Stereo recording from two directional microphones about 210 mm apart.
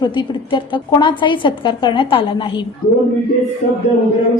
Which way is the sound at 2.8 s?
45° left (ahead or behind).